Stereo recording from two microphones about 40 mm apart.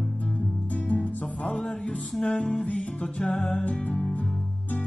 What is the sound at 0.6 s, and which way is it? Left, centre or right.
Music, left.